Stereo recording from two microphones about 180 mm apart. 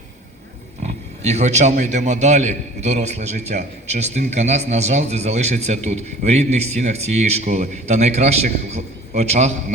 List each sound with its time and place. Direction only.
0.8 s speech: 40° right (ahead or behind)